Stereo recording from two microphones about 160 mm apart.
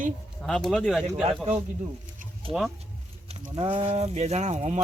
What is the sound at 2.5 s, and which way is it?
Speech, 35° right (ahead or behind).